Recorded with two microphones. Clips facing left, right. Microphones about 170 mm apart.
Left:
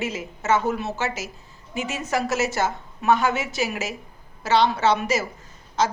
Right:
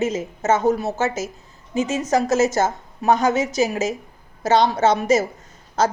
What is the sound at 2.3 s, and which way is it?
A woman's voice, 45° right (ahead or behind).